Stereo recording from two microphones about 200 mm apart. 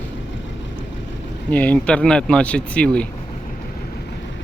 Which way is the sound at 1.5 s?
5° left (ahead or behind).